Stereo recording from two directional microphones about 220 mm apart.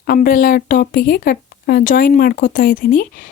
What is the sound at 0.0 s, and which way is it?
Speech, 40° left (ahead or behind).